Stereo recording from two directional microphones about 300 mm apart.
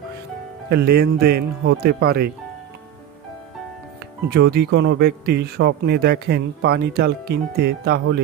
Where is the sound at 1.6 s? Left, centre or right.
Right.